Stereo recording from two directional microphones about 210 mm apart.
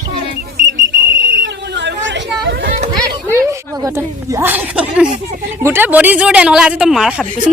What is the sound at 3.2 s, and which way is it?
A woman's voice, 15° right (ahead or behind).